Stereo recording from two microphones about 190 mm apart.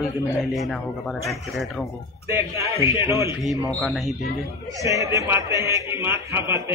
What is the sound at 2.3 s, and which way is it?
A man's voice, 15° right (ahead or behind).